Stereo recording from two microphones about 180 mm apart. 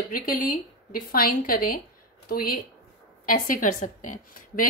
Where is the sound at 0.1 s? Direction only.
50° left (ahead or behind).